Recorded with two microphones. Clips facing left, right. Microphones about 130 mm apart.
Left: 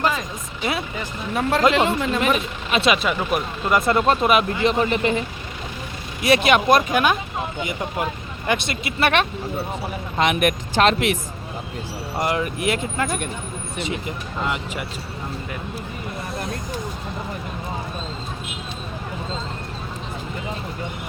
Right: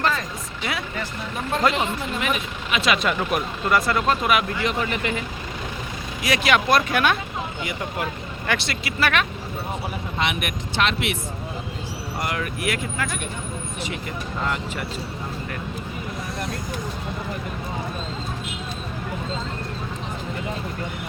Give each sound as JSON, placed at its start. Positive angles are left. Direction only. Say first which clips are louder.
{"t": 0.0, "sound": "a sound", "louder": "left 1 dB", "side_deg": 15}
{"t": 1.3, "sound": "speech", "louder": "left 5 dB", "side_deg": 90}
{"t": 2.2, "sound": "speech", "louder": "left 5 dB", "side_deg": 35}
{"t": 3.0, "sound": "speech", "louder": "left 1 dB", "side_deg": 5}
{"t": 3.7, "sound": "speech", "louder": "left 3 dB", "side_deg": 25}
{"t": 6.2, "sound": "speech", "louder": "left 4 dB", "side_deg": 25}
{"t": 8.4, "sound": "speech", "louder": "left 3 dB", "side_deg": 20}
{"t": 10.2, "sound": "speech", "louder": "left 8 dB", "side_deg": 45}
{"t": 12.2, "sound": "speech", "louder": "left 5 dB", "side_deg": 25}
{"t": 14.4, "sound": "speech", "louder": "left 1 dB", "side_deg": 15}